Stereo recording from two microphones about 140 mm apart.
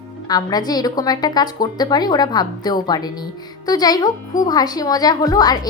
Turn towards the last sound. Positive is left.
turn(degrees=25)  # may be behind; listen again after turning